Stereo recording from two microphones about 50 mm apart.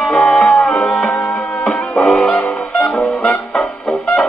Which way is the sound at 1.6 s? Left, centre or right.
Centre.